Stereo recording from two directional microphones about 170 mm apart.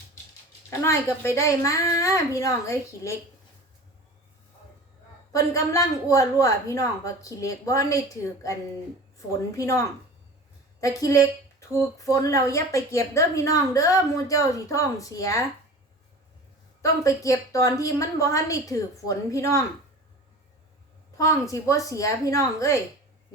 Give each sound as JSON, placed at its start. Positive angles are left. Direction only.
{"t": 0.7, "sound": "a woman's voice", "side_deg": 15}
{"t": 5.3, "sound": "a woman's voice", "side_deg": 20}
{"t": 9.6, "sound": "a woman's voice", "side_deg": 20}
{"t": 16.8, "sound": "a woman's voice", "side_deg": 20}
{"t": 21.2, "sound": "a woman's voice", "side_deg": 20}